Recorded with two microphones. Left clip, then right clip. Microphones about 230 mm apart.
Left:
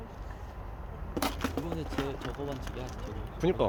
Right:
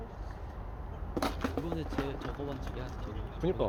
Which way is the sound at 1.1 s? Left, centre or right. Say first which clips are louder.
Left 1 dB; left.